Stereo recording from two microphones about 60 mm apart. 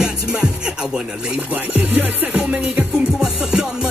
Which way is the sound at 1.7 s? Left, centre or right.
Right.